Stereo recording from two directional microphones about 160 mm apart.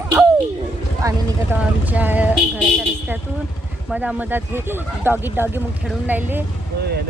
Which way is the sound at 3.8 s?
10° right (ahead or behind).